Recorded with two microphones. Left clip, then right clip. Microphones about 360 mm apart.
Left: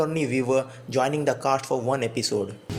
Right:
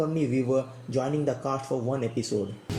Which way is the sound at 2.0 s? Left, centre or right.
Left.